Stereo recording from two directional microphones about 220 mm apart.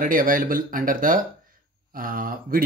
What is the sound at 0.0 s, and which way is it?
Speech, 40° right (ahead or behind).